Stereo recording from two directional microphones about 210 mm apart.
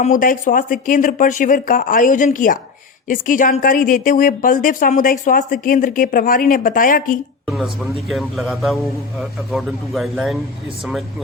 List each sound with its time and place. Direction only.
0.0 s speech: 40° left (ahead or behind)
8.0 s a man's voice: centre (ahead or behind)